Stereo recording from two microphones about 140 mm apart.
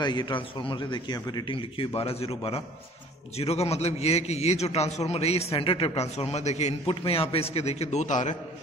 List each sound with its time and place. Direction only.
0.0 s a man's voice: 30° left (ahead or behind); by 8.4 s 60° left (ahead or behind)